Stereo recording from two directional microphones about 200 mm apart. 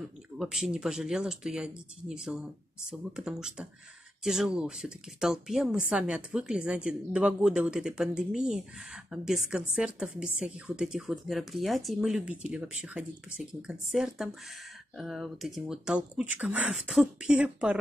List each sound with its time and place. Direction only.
0.4 s speech: centre (ahead or behind)